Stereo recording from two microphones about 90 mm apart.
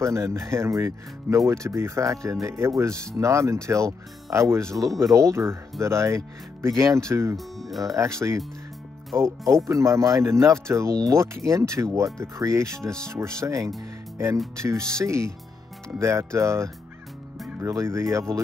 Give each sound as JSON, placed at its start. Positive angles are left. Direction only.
{"t": 0.0, "sound": "speech", "side_deg": -30}
{"t": 7.3, "sound": "speech", "side_deg": 0}
{"t": 7.8, "sound": "speech", "side_deg": -35}